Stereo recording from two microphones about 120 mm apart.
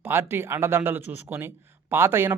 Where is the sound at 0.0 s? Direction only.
20° right (ahead or behind).